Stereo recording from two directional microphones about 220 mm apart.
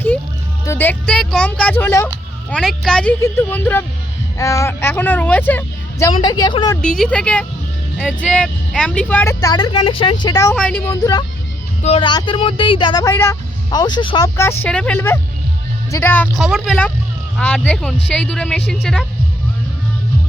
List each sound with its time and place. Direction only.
0.6 s speech: 10° left (ahead or behind)
6.8 s speech: 5° left (ahead or behind)
10.5 s speech: 5° left (ahead or behind)
10.9 s speech: 15° left (ahead or behind)